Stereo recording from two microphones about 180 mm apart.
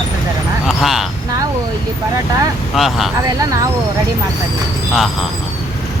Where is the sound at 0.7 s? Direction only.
Centre (ahead or behind).